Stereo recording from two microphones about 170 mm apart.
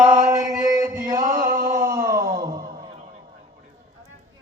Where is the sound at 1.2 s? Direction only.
55° right (ahead or behind).